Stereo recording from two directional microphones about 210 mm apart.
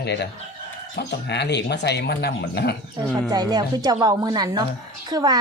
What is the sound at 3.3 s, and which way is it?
Speech, 20° right (ahead or behind).